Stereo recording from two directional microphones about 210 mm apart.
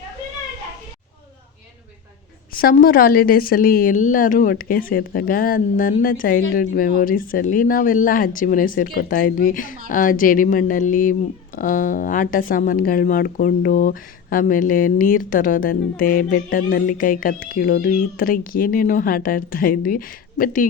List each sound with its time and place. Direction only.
2.5 s a woman's voice: 45° left (ahead or behind)